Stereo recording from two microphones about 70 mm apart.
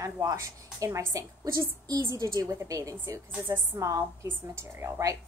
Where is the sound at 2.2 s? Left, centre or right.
Right.